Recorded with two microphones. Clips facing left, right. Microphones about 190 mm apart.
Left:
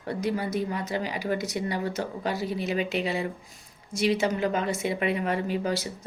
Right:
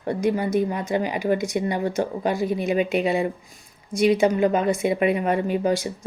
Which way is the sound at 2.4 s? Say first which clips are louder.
Right 6 dB; 50° right (ahead or behind).